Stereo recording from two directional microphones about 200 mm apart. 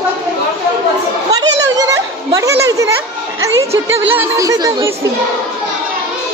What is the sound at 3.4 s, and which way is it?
Speech, 15° right (ahead or behind).